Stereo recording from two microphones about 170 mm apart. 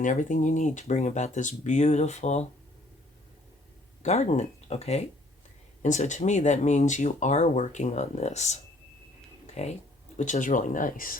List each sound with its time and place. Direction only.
0.0 s speech: 50° left (ahead or behind)
4.0 s speech: 40° left (ahead or behind)
10.2 s speech: 45° left (ahead or behind)